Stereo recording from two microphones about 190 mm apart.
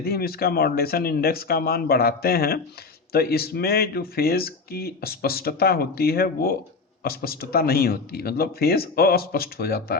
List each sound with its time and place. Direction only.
0.0 s speech: 55° left (ahead or behind)